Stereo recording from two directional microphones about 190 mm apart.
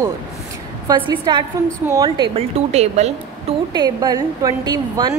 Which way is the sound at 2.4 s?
35° right (ahead or behind).